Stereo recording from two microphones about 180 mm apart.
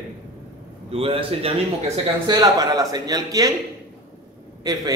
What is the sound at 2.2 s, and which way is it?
A man's voice, 20° right (ahead or behind).